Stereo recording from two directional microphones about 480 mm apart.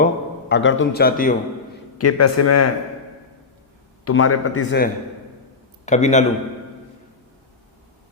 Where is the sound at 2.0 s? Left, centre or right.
Left.